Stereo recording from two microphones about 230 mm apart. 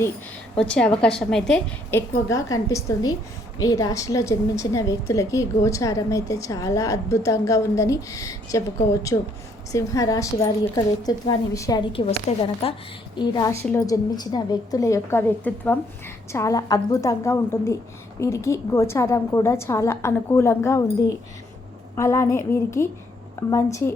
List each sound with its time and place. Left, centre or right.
0.5 s a woman's voice: centre
21.9 s a woman's voice: centre